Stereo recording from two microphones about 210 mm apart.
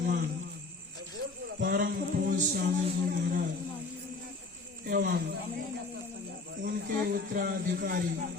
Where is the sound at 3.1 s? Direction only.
40° right (ahead or behind).